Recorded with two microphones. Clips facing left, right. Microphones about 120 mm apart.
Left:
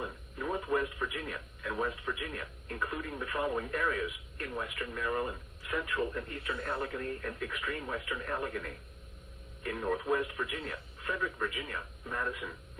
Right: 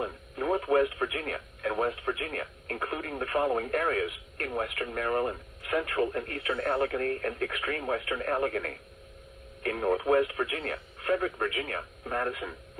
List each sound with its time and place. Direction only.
0.0 s speech: 65° right (ahead or behind)